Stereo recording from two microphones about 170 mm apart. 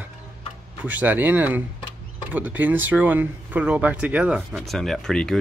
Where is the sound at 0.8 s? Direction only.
10° right (ahead or behind).